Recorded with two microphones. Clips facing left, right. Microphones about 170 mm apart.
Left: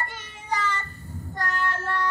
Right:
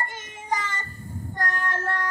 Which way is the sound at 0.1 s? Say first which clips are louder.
Right 1 dB; 45° right (ahead or behind).